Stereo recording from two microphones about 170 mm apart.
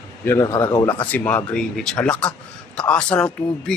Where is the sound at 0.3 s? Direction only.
20° left (ahead or behind).